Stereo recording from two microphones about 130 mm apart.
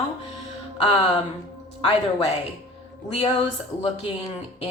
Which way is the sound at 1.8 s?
45° left (ahead or behind).